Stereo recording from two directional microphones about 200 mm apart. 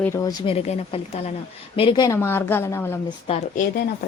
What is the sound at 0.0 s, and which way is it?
Speech, 15° left (ahead or behind).